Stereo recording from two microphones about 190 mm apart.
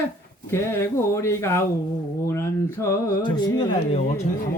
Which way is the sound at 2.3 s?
15° left (ahead or behind).